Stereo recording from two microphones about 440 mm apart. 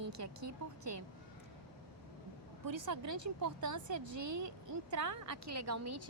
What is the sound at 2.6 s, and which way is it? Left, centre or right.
A woman's voice, right.